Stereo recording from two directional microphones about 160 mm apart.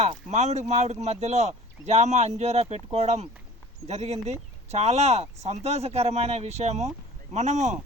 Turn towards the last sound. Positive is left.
turn(degrees=-45)  # may be behind; listen again after turning